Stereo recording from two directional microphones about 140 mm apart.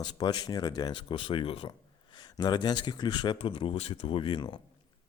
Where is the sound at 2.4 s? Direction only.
30° left (ahead or behind).